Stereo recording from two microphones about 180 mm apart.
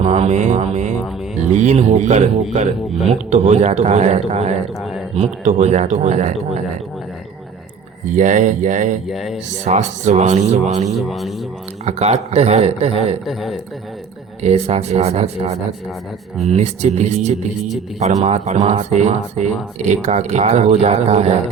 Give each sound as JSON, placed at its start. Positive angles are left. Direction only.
{"t": 0.0, "sound": "music", "side_deg": -35}
{"t": 1.5, "sound": "speech", "side_deg": -40}
{"t": 8.1, "sound": "speech", "side_deg": -45}
{"t": 9.0, "sound": "speech", "side_deg": 0}
{"t": 9.6, "sound": "speech", "side_deg": -40}
{"t": 10.9, "sound": "speech", "side_deg": 0}
{"t": 11.9, "sound": "speech", "side_deg": -35}
{"t": 13.2, "sound": "speech", "side_deg": 0}
{"t": 14.4, "sound": "speech", "side_deg": -35}